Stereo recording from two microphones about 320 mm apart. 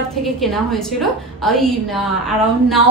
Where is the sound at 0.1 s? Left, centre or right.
Centre.